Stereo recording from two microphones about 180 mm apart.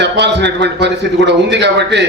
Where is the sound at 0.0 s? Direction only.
75° right (ahead or behind).